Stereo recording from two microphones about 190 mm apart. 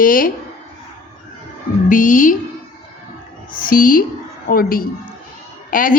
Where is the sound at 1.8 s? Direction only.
45° left (ahead or behind).